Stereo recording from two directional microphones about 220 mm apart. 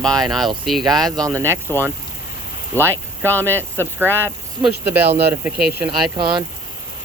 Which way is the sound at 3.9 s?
10° right (ahead or behind).